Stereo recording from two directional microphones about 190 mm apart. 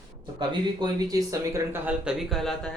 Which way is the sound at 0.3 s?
20° right (ahead or behind).